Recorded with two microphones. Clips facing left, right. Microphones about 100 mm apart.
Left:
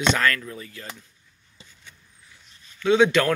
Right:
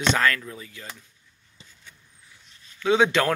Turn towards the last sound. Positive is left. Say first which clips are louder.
# left 2 dB
turn(degrees=-25)  # may be behind; listen again after turning